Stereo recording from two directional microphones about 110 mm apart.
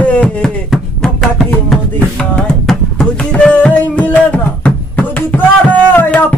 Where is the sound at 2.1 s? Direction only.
5° left (ahead or behind).